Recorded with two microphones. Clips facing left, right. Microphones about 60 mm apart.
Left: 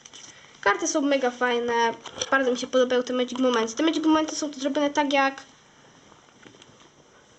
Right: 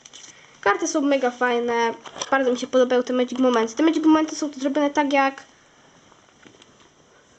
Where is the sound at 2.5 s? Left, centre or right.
Right.